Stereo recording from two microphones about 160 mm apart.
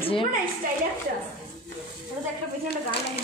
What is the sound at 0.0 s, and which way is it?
Speech, 35° left (ahead or behind).